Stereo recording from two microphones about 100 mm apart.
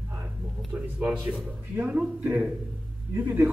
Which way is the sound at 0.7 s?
15° right (ahead or behind).